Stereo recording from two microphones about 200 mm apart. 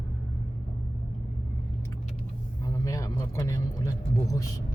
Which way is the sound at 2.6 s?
15° left (ahead or behind).